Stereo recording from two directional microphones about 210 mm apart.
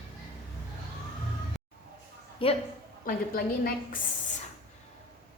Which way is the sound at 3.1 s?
45° left (ahead or behind).